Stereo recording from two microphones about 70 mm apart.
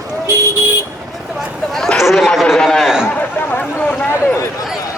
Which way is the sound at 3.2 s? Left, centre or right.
Left.